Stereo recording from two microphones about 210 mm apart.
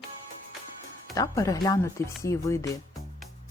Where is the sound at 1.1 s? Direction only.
15° left (ahead or behind).